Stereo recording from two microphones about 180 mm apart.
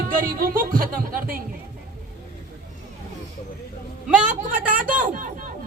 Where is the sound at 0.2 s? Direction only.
50° right (ahead or behind).